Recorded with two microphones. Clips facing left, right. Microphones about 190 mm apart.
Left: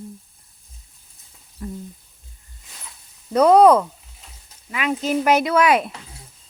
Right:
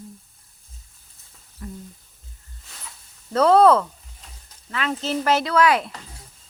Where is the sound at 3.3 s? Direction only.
15° left (ahead or behind).